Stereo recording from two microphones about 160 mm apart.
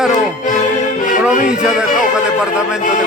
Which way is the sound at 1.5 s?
5° right (ahead or behind).